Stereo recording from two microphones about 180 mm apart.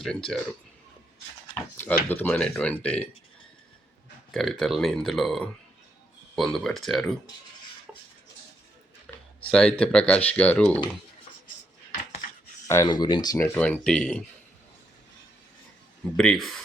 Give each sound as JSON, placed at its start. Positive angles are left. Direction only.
{"t": 0.0, "sound": "speech", "side_deg": 5}
{"t": 1.7, "sound": "drawer open or close", "side_deg": 10}
{"t": 2.0, "sound": "speech", "side_deg": 10}
{"t": 4.3, "sound": "speech", "side_deg": 0}
{"t": 9.0, "sound": "speech", "side_deg": 5}
{"t": 12.6, "sound": "speech", "side_deg": 20}
{"t": 16.1, "sound": "speech", "side_deg": 5}